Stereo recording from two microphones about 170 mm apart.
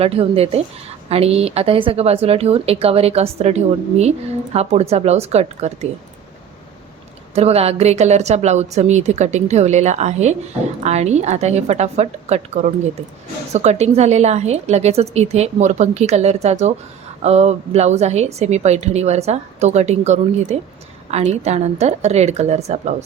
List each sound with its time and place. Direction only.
0.0 s a woman's voice: 35° right (ahead or behind)
7.3 s a woman's voice: 35° right (ahead or behind)
13.5 s a woman's voice: 40° right (ahead or behind)